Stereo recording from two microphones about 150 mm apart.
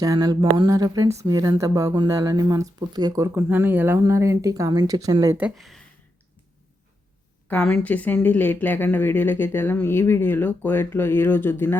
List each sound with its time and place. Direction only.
0.0 s speech: 25° right (ahead or behind)
5.4 s speech: 5° right (ahead or behind)
7.4 s speech: 10° left (ahead or behind)